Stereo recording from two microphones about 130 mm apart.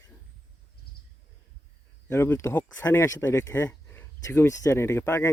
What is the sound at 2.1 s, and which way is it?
Speech, 20° left (ahead or behind).